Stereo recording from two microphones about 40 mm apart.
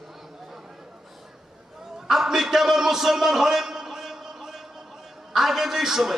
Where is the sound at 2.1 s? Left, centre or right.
Centre.